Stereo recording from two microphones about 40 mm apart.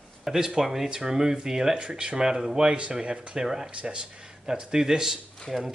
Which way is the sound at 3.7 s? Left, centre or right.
Right.